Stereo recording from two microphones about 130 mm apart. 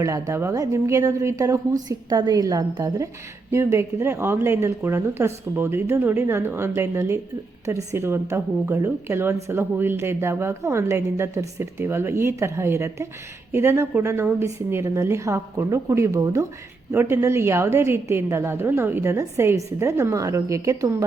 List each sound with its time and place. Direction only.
0.0 s speech: 25° right (ahead or behind)